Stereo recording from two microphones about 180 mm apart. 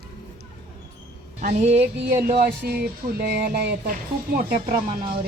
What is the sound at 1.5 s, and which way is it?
Music, 40° right (ahead or behind).